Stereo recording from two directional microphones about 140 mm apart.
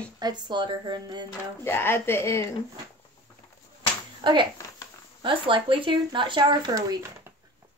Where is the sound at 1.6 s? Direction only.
15° left (ahead or behind).